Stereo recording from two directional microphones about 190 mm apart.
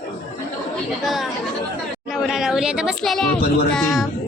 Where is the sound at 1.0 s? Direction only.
Centre (ahead or behind).